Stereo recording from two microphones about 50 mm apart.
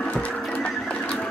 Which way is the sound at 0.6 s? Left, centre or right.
Left.